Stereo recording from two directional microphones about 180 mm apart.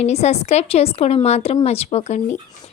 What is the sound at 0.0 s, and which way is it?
Speech, 35° left (ahead or behind).